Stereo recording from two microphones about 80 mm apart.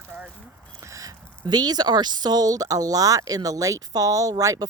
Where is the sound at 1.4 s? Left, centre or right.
Right.